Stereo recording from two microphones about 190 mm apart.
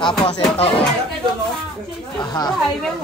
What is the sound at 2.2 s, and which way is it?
Speech, 20° left (ahead or behind).